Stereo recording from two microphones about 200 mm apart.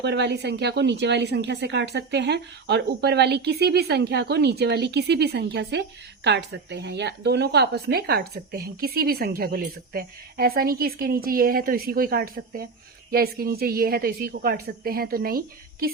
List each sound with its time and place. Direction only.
0.0 s speech: 60° right (ahead or behind)